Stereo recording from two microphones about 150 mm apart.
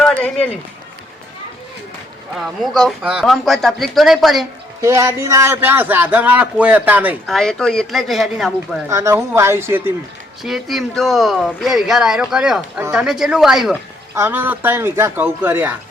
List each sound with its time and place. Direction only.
0.0 s a sound: 10° left (ahead or behind)
2.3 s speech: centre (ahead or behind)
4.8 s a man's voice: 20° right (ahead or behind)
7.3 s speech: 5° left (ahead or behind)
8.9 s a man's voice: 20° right (ahead or behind)
10.4 s speech: centre (ahead or behind)
14.2 s a man's voice: 15° right (ahead or behind)